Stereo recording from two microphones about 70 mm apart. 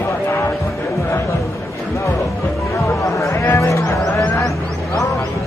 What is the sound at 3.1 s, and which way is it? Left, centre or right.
Speech, left.